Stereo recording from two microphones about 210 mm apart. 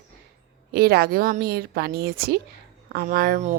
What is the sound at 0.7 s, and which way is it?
A woman's voice, 50° right (ahead or behind).